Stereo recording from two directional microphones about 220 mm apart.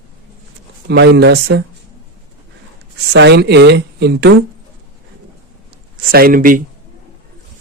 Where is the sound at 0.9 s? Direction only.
50° right (ahead or behind).